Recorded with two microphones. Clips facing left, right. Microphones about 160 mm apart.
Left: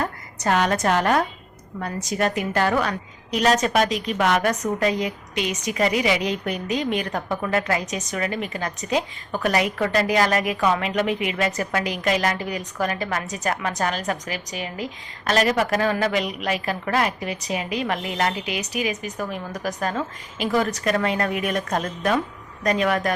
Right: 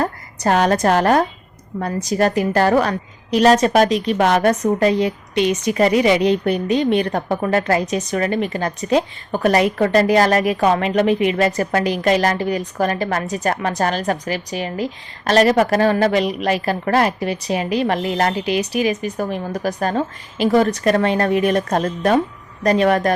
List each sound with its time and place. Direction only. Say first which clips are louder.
0.0 s a woman's voice: right 5 dB; 40° right (ahead or behind)